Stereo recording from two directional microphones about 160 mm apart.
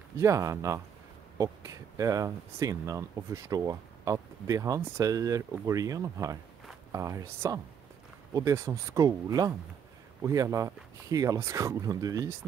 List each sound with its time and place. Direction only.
0.2 s speech: 20° right (ahead or behind)